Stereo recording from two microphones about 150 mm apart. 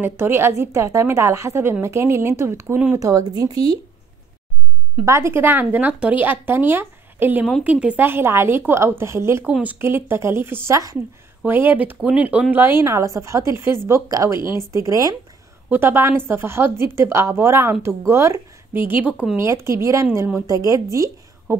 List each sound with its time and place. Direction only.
0.0 s a woman's voice: 15° right (ahead or behind)
3.1 s a woman's voice: 25° right (ahead or behind)
5.0 s a woman's voice: 15° right (ahead or behind)
9.4 s a woman's voice: 5° right (ahead or behind)
19.3 s a woman's voice: 20° right (ahead or behind)